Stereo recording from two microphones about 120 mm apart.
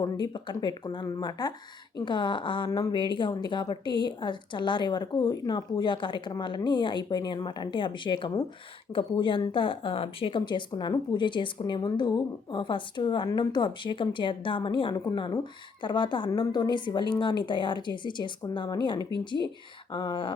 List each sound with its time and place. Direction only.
0.0 s speech: 40° left (ahead or behind)
2.6 s speech: 35° left (ahead or behind)